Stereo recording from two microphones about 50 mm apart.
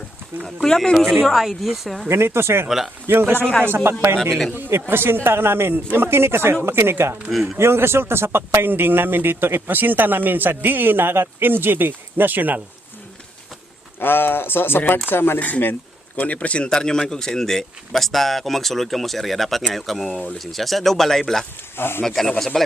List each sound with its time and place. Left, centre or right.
0.4 s speech: centre
2.0 s speech: right
2.6 s speech: centre
3.1 s speech: right
4.2 s speech: centre
4.7 s speech: right
7.3 s speech: centre
7.6 s speech: right
14.0 s speech: left
15.4 s speech: left
16.7 s speech: centre
21.8 s speech: left
22.0 s speech: centre